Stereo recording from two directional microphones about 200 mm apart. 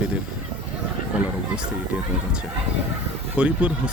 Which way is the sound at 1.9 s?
5° right (ahead or behind).